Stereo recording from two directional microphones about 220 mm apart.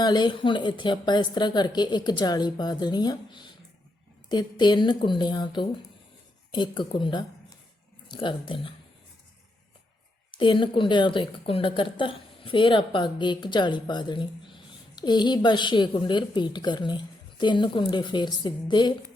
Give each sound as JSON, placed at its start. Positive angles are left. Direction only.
{"t": 0.0, "sound": "speech", "side_deg": 20}
{"t": 10.3, "sound": "speech", "side_deg": 20}